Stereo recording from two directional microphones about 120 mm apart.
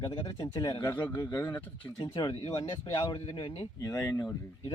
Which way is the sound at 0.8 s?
15° left (ahead or behind).